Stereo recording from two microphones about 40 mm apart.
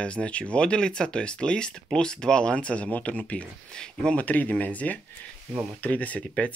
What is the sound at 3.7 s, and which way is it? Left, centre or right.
Speech, centre.